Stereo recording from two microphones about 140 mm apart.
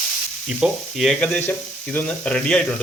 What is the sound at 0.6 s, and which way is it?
Speech, centre (ahead or behind).